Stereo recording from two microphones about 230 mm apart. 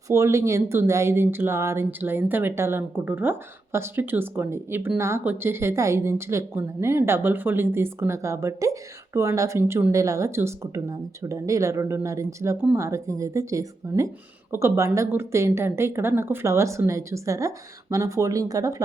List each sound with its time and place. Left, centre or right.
0.1 s speech: centre